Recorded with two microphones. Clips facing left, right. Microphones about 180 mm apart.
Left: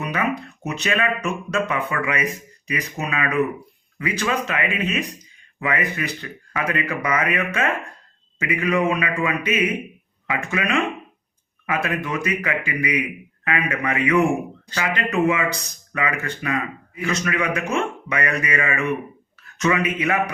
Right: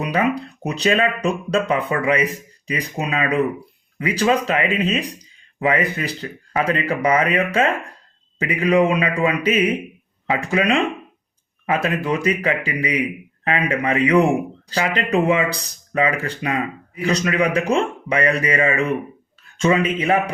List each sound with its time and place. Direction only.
0.1 s a man's voice: 35° right (ahead or behind)